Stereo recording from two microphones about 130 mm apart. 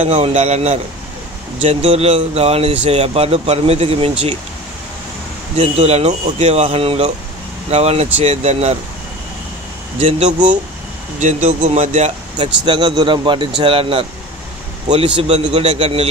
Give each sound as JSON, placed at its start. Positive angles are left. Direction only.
{"t": 0.0, "sound": "speech", "side_deg": -55}
{"t": 5.6, "sound": "speech", "side_deg": -55}
{"t": 9.9, "sound": "speech", "side_deg": -50}
{"t": 11.1, "sound": "speech", "side_deg": -65}
{"t": 12.4, "sound": "speech", "side_deg": -40}
{"t": 15.1, "sound": "speech", "side_deg": -50}